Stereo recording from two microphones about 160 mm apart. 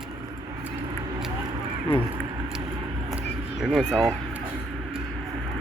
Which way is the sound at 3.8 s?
5° left (ahead or behind).